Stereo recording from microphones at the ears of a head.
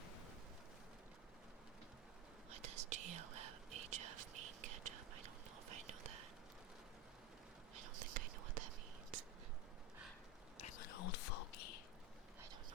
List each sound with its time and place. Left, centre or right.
2.5 s whispering: right
7.8 s whispering: right
10.6 s whispering: left